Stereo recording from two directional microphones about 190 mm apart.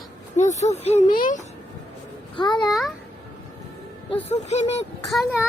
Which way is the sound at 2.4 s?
25° left (ahead or behind).